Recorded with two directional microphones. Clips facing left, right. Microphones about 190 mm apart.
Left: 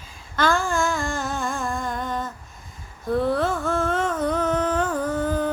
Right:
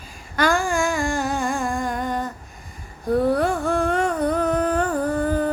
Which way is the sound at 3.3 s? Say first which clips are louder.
Right 2 dB; 15° right (ahead or behind).